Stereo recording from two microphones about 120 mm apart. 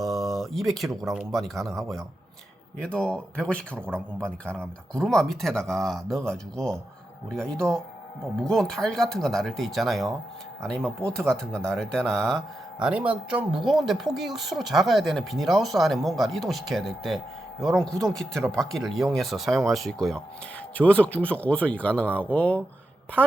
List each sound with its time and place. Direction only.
0.0 s a sound: centre (ahead or behind)
1.3 s speech: centre (ahead or behind)
12.8 s speech: 10° right (ahead or behind); by 22.6 s 10° left (ahead or behind)
23.2 s a woman's voice: 15° right (ahead or behind)